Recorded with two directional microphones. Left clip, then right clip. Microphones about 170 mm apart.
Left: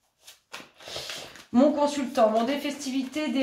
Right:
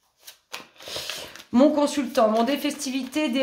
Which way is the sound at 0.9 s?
45° right (ahead or behind).